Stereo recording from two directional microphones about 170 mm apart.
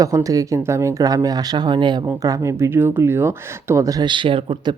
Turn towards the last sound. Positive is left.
turn(degrees=-30)  # may be behind; listen again after turning